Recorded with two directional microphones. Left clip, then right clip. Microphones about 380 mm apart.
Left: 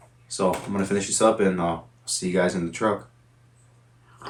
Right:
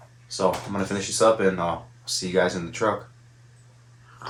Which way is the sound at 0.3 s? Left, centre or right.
Centre.